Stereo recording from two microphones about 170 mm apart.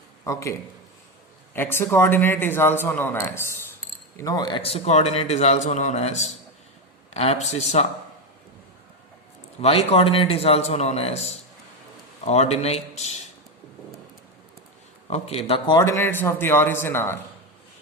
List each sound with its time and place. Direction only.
0.3 s a man's voice: 20° left (ahead or behind)
1.5 s a man's voice: 15° left (ahead or behind); by 7.9 s 40° left (ahead or behind)
9.6 s a man's voice: 35° left (ahead or behind)
15.0 s a man's voice: 40° left (ahead or behind)
15.8 s a man's voice: 15° left (ahead or behind)